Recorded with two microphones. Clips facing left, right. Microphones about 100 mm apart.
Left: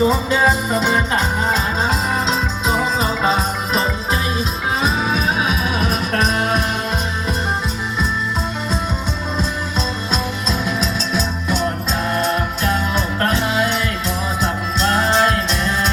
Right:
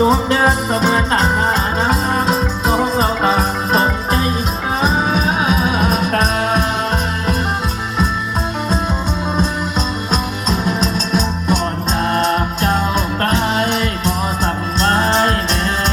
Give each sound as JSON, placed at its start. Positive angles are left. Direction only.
{"t": 0.0, "sound": "music", "side_deg": -60}
{"t": 10.1, "sound": "music", "side_deg": -45}